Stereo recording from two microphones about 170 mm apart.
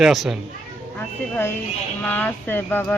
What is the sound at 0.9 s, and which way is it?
Speech, 15° left (ahead or behind).